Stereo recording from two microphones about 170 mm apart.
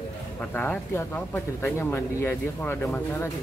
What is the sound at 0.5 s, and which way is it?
Speech, 10° left (ahead or behind).